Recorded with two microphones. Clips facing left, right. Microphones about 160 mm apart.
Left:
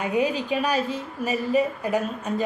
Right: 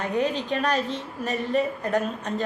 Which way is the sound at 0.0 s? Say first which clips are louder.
Left 2 dB; 10° left (ahead or behind).